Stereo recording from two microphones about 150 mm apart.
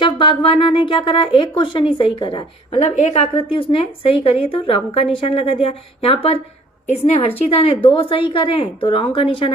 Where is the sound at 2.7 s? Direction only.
50° left (ahead or behind).